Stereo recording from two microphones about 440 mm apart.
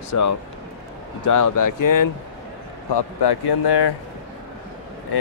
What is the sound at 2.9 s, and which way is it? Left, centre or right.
Speech, left.